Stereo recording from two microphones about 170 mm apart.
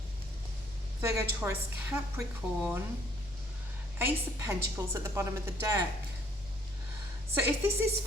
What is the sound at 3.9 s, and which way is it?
Speech, 15° right (ahead or behind).